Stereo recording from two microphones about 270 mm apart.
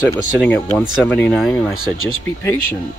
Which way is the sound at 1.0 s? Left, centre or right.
Centre.